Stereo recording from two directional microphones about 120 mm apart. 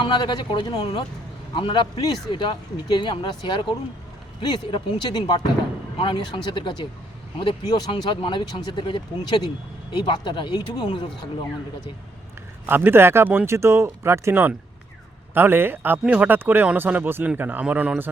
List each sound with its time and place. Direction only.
0.0 s speech: 40° left (ahead or behind)
12.6 s speech: 15° right (ahead or behind)